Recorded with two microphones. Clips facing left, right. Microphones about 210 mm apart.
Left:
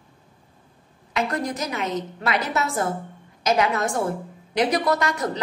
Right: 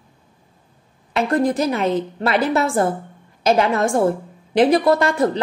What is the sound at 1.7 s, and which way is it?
A woman's voice, 30° right (ahead or behind).